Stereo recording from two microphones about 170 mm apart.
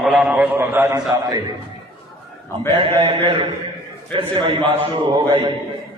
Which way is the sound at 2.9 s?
30° right (ahead or behind).